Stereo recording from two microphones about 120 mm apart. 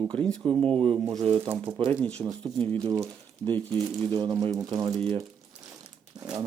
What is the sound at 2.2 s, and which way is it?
Speech, 25° right (ahead or behind).